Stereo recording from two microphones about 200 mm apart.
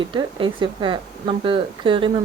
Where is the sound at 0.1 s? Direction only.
25° right (ahead or behind).